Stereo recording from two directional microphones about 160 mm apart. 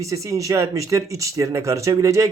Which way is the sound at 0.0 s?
20° right (ahead or behind).